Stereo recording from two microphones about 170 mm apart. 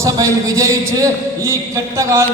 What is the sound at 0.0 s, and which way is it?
A man's voice, 20° right (ahead or behind).